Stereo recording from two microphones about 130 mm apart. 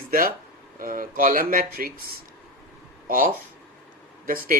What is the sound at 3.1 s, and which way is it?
Speech, 90° right.